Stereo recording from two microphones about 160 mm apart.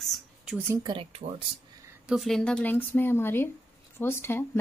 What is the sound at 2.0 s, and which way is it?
Speech, centre (ahead or behind).